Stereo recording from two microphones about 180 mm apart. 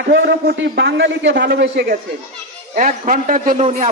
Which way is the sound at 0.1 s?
75° right (ahead or behind).